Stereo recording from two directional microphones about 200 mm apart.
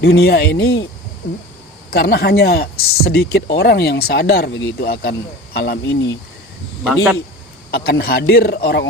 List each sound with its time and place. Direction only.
0.0 s speech: 55° left (ahead or behind)
1.9 s speech: 50° left (ahead or behind)
6.8 s speech: 5° right (ahead or behind)
7.7 s speech: 50° left (ahead or behind)